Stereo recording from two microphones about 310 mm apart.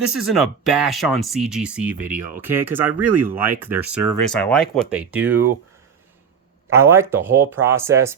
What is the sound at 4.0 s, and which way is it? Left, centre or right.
Speech, right.